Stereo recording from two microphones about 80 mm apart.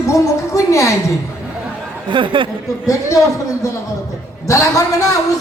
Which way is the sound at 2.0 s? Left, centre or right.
Right.